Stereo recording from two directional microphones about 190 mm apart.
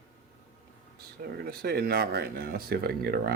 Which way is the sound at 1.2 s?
55° right (ahead or behind).